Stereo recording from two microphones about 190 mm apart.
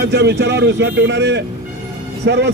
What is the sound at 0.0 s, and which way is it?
A man's voice, 65° right (ahead or behind).